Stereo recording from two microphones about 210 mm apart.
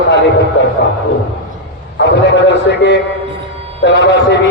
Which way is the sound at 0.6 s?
55° left (ahead or behind).